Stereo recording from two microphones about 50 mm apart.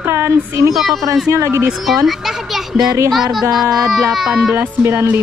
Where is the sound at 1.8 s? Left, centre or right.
Centre.